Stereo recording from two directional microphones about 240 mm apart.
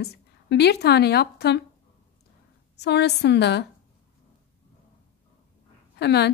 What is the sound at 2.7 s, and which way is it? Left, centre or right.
Speech, left.